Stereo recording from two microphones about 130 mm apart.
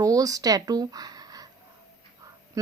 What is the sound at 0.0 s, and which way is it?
A woman's voice, 25° right (ahead or behind).